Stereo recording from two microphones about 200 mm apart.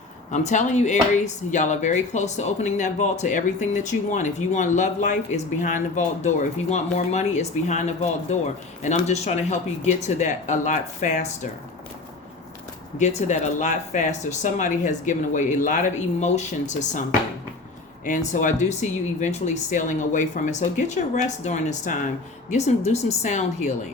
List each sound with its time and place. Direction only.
0.3 s speech: 35° left (ahead or behind)
13.0 s speech: 35° left (ahead or behind)